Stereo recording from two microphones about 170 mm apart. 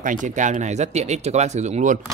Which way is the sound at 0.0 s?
50° right (ahead or behind).